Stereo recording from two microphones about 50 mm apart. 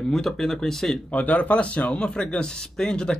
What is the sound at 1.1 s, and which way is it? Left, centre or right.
Speech, left.